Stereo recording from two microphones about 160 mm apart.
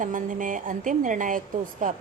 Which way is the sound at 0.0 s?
55° right (ahead or behind).